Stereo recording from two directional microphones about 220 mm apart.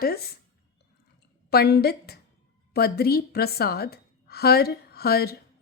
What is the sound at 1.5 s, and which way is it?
A woman's voice, 45° left (ahead or behind).